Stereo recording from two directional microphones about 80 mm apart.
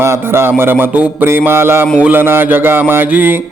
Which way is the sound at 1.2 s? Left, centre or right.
Right.